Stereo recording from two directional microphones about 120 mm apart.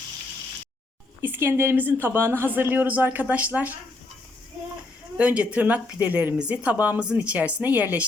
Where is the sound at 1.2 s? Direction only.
15° right (ahead or behind).